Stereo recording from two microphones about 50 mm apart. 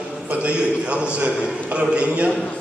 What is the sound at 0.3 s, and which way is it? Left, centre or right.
A man's voice, right.